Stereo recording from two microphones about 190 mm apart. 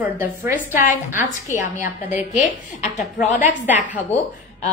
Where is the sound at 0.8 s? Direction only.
45° left (ahead or behind).